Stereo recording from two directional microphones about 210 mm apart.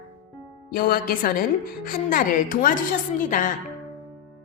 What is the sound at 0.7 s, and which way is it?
A woman's voice, 45° left (ahead or behind).